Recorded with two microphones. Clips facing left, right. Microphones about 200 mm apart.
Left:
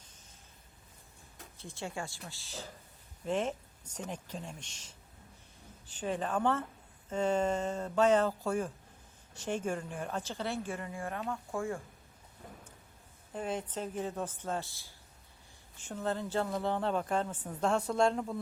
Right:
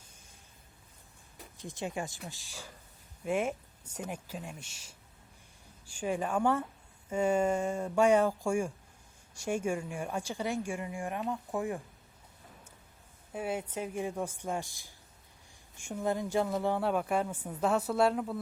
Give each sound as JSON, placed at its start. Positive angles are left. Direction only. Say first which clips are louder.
{"t": 1.4, "sound": "a woman's voice", "louder": "right 4 dB", "side_deg": -15}
{"t": 13.3, "sound": "a woman's voice", "louder": "right 1 dB", "side_deg": -10}